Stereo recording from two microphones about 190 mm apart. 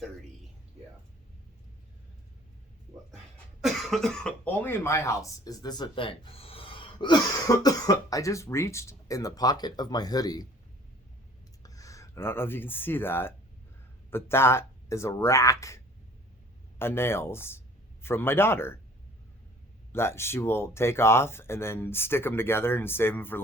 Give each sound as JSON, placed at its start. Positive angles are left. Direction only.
{"t": 3.6, "sound": "speech", "side_deg": 0}
{"t": 11.6, "sound": "speech", "side_deg": 15}
{"t": 19.9, "sound": "speech", "side_deg": 15}